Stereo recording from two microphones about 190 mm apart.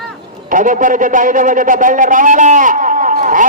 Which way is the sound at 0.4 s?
45° right (ahead or behind).